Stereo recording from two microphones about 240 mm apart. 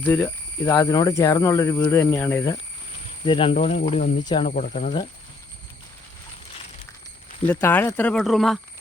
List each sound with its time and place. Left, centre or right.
0.1 s speech: centre; by 5.0 s left
7.4 s speech: centre